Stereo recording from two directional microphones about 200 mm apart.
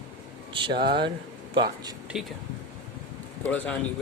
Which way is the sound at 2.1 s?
5° right (ahead or behind).